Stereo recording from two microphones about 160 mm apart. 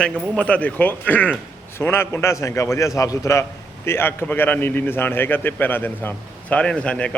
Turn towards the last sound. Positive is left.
turn(degrees=5)  # may be behind; listen again after turning